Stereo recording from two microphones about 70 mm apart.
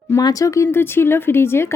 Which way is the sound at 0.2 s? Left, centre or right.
Left.